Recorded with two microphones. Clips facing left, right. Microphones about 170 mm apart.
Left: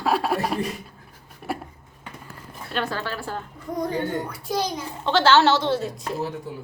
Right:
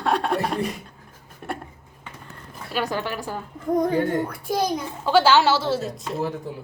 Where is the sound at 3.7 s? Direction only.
50° right (ahead or behind).